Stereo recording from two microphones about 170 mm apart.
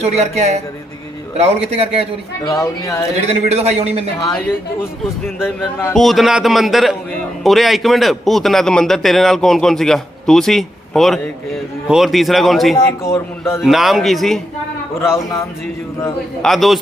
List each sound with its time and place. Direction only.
0.0 s a man's voice: 40° right (ahead or behind)
2.4 s speech: 20° left (ahead or behind)
3.2 s a man's voice: 40° right (ahead or behind)
5.5 s a man's voice: 5° left (ahead or behind)
12.7 s a man's voice: 15° left (ahead or behind)
13.6 s a man's voice: centre (ahead or behind)
15.0 s a man's voice: 15° left (ahead or behind)
16.4 s a man's voice: centre (ahead or behind)